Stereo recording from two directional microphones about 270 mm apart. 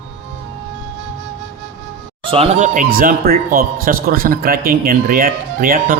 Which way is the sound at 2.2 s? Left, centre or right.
Right.